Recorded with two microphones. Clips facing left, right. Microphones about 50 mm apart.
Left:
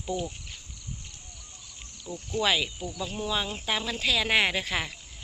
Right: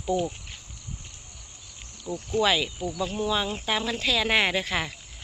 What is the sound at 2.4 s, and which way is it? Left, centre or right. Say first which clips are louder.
Speech: right 3 dB; centre.